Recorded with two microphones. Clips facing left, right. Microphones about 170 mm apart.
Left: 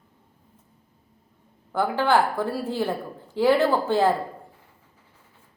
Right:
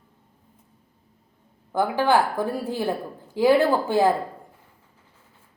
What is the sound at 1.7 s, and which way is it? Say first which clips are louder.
A woman's voice: right 1 dB; 15° right (ahead or behind).